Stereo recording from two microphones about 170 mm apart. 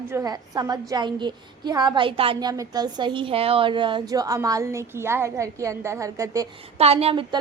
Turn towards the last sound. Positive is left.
turn(degrees=-35)  # may be behind; listen again after turning